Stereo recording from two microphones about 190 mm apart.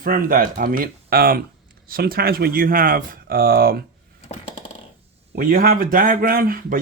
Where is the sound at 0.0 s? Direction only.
50° right (ahead or behind).